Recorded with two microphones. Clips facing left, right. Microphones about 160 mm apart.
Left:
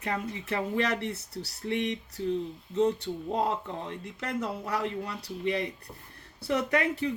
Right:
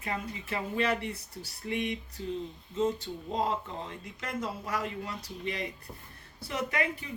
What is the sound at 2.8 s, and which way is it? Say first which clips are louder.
Speech: left 4 dB; 70° left (ahead or behind).